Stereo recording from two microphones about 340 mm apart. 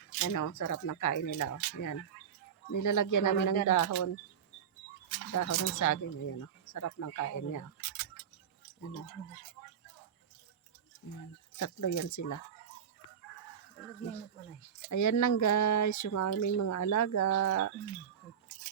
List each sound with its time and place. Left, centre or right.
0.2 s speech: left
5.3 s speech: left
11.1 s speech: left
14.8 s speech: left